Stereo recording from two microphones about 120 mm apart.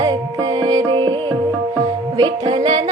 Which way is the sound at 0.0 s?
35° right (ahead or behind).